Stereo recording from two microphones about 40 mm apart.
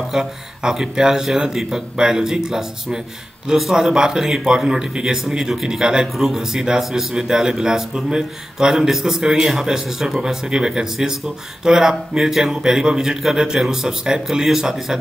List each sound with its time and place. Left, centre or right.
0.1 s speech: centre